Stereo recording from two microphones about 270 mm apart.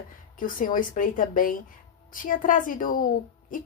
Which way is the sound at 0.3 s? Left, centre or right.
Left.